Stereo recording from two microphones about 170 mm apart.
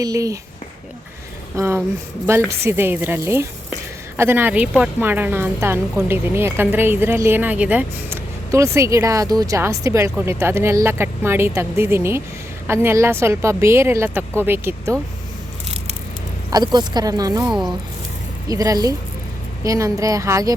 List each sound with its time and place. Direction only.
0.0 s speech: 20° right (ahead or behind)
1.5 s speech: 15° right (ahead or behind)
16.5 s speech: 25° right (ahead or behind)
17.5 s speech: centre (ahead or behind)
18.4 s speech: 20° right (ahead or behind)